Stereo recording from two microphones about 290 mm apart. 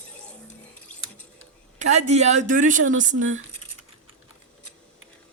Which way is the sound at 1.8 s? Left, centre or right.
Right.